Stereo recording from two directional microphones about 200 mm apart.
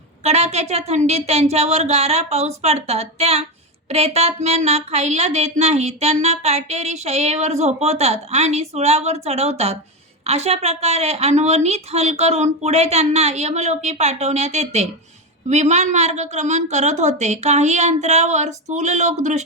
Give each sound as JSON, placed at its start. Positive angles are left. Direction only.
{"t": 0.3, "sound": "speech", "side_deg": -30}